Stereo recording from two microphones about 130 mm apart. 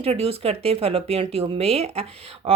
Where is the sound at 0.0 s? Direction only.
50° right (ahead or behind).